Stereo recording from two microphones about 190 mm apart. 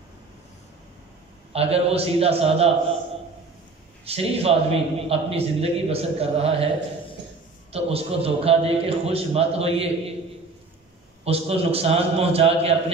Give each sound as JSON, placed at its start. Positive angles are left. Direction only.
{"t": 1.5, "sound": "a man's voice", "side_deg": -30}
{"t": 4.0, "sound": "a man's voice", "side_deg": -30}
{"t": 7.7, "sound": "a man's voice", "side_deg": -30}
{"t": 11.2, "sound": "a man's voice", "side_deg": -30}